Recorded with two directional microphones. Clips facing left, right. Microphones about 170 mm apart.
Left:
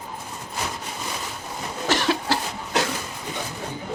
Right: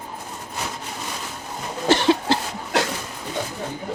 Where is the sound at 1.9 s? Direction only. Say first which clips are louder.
Right 5 dB; 25° right (ahead or behind).